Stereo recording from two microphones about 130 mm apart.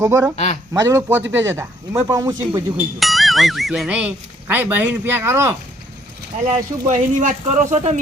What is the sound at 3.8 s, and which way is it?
Speech, 10° right (ahead or behind).